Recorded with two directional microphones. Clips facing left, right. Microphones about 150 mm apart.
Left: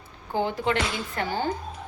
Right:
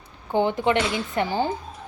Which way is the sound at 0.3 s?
25° right (ahead or behind).